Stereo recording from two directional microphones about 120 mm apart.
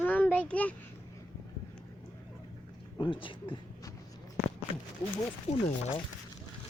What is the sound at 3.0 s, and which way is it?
Speech, 45° left (ahead or behind).